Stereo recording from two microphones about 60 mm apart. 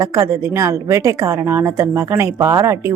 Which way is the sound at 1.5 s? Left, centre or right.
Right.